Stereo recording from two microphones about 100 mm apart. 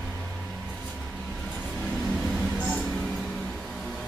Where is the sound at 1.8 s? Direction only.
Centre (ahead or behind).